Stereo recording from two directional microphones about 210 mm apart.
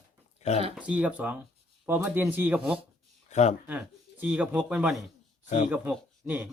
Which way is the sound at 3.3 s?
35° left (ahead or behind).